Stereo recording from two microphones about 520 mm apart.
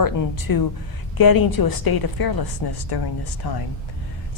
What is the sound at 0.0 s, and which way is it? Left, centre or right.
A woman's voice, left.